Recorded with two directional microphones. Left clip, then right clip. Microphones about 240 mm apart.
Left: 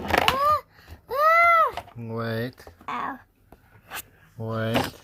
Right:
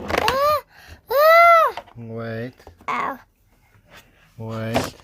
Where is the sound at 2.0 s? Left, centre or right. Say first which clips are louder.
Even; centre.